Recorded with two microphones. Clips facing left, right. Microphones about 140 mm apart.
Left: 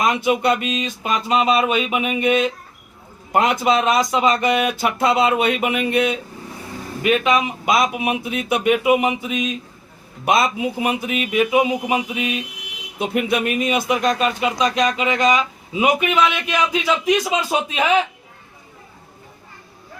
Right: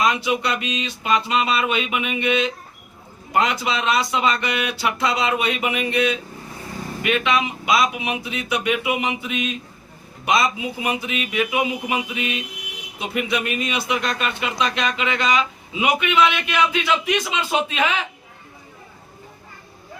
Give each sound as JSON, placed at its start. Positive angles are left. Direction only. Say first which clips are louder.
{"t": 0.0, "sound": "speech", "louder": "left 3 dB", "side_deg": 50}
{"t": 10.2, "sound": "a man's voice", "louder": "left 2 dB", "side_deg": 50}